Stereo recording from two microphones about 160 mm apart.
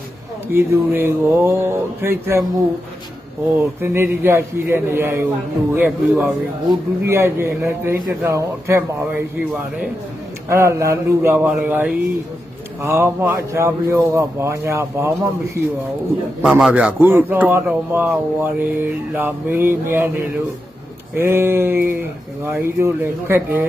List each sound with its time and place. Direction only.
0.5 s a man's voice: 15° right (ahead or behind)
3.8 s a man's voice: 15° right (ahead or behind)
10.5 s a man's voice: 15° right (ahead or behind)
16.4 s a man's voice: 5° right (ahead or behind)